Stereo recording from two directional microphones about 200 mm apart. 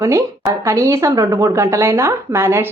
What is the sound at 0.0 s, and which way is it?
Speech, 15° right (ahead or behind).